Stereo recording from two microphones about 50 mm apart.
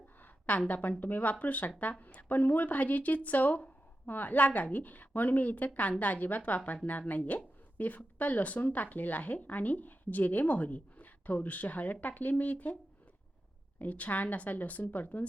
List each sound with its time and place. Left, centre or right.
0.7 s a woman's voice: left
13.7 s a woman's voice: left